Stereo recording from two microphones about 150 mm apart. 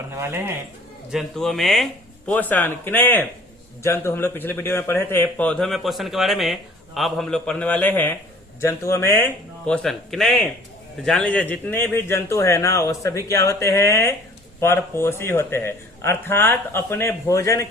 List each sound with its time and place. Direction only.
0.2 s speech: 15° right (ahead or behind)
1.1 s a man's voice: centre (ahead or behind); by 17.7 s 20° left (ahead or behind)